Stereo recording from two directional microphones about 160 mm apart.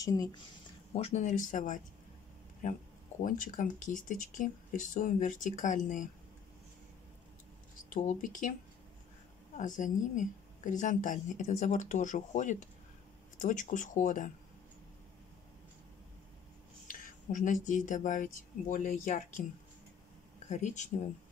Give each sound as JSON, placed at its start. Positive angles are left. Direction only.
{"t": 0.0, "sound": "a woman's voice", "side_deg": 25}
{"t": 0.9, "sound": "a woman's voice", "side_deg": 45}
{"t": 3.2, "sound": "speech", "side_deg": 55}
{"t": 7.9, "sound": "a woman's voice", "side_deg": 55}
{"t": 9.6, "sound": "a woman's voice", "side_deg": 55}
{"t": 16.8, "sound": "speech", "side_deg": 55}
{"t": 20.4, "sound": "speech", "side_deg": 45}